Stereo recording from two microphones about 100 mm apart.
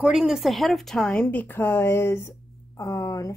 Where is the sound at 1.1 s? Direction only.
15° left (ahead or behind).